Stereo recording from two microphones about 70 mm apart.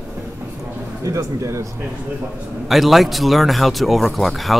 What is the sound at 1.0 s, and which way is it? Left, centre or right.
Speech, right.